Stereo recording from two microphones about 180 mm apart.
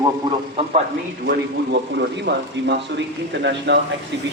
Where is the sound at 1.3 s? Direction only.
70° right (ahead or behind).